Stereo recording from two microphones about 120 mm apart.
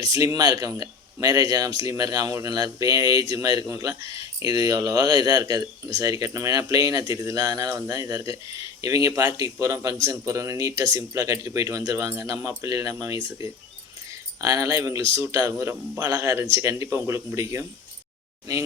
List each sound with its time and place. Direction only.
0.0 s speech: 30° right (ahead or behind)